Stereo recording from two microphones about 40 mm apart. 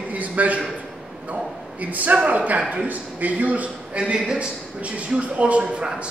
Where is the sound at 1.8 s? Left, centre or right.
Right.